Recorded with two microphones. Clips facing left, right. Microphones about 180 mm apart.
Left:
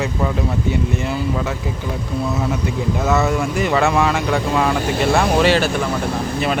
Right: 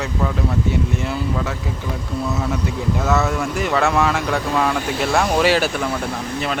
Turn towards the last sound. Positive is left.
turn(degrees=-5)  # may be behind; listen again after turning